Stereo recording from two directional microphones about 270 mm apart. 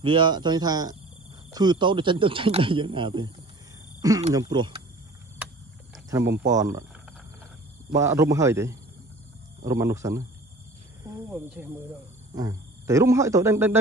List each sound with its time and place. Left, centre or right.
0.0 s speech: centre
4.3 s speech: centre
6.0 s speech: centre
7.9 s speech: centre
11.2 s speech: centre